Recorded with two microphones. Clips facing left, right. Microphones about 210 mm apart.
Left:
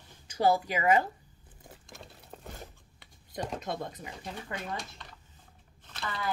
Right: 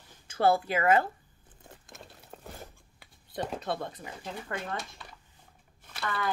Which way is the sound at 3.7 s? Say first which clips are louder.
Right 2 dB; 15° left (ahead or behind).